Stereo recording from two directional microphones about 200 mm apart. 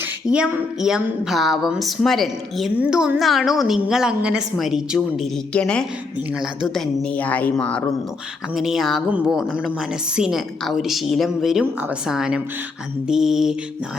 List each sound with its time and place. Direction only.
0.3 s speech: 5° right (ahead or behind)